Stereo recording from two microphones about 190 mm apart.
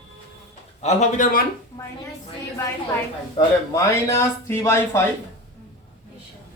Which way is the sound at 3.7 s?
15° left (ahead or behind).